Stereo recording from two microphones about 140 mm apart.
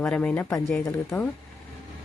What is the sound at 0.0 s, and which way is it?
Speech, 10° left (ahead or behind).